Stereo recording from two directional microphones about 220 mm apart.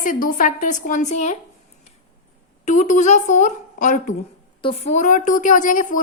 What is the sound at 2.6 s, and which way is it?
A woman's voice, 35° left (ahead or behind).